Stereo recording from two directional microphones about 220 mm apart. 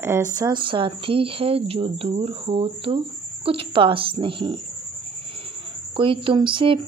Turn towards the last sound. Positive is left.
turn(degrees=-25)  # may be behind; listen again after turning